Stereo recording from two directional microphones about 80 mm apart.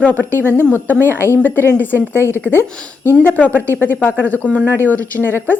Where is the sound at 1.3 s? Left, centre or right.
Left.